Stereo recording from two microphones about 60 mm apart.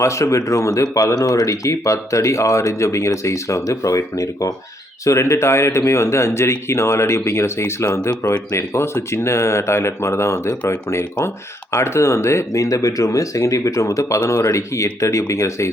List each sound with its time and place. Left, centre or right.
0.0 s speech: left
5.0 s speech: left
11.8 s speech: left
14.1 s speech: left